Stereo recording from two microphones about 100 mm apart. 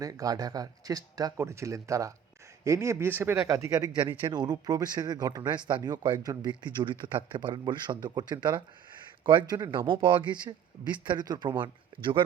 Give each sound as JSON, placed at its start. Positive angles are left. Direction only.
{"t": 0.0, "sound": "speech", "side_deg": -35}
{"t": 1.4, "sound": "a man's voice", "side_deg": -30}